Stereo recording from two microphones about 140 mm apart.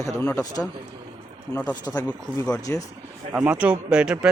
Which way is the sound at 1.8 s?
25° left (ahead or behind).